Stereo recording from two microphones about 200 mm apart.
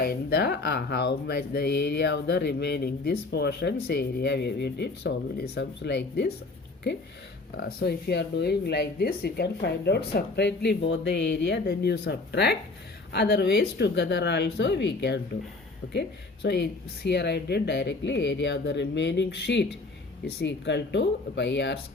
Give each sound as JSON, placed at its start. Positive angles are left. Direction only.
{"t": 0.0, "sound": "speech", "side_deg": 50}
{"t": 7.5, "sound": "speech", "side_deg": 55}